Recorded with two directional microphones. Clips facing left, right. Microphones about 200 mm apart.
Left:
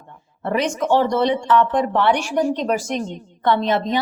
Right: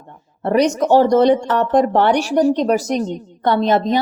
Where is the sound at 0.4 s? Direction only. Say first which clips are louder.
Right 5 dB; 40° right (ahead or behind).